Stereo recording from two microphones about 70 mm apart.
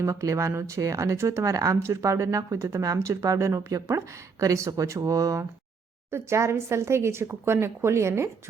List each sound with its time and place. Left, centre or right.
0.0 s speech: right
6.1 s speech: right